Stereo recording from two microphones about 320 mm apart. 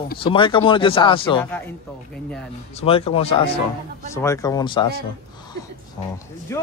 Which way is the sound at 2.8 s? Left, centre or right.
Centre.